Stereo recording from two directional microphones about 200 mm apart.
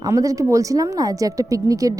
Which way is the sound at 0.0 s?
15° right (ahead or behind).